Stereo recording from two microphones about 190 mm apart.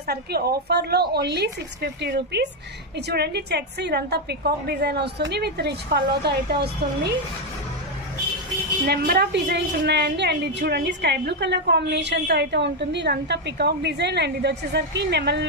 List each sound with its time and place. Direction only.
0.0 s a woman's voice: 55° right (ahead or behind)
8.8 s a woman's voice: 55° right (ahead or behind)